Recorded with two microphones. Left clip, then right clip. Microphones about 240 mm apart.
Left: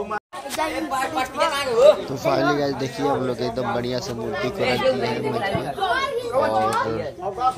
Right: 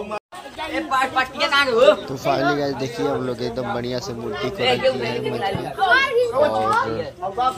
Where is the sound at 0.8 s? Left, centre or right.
Left.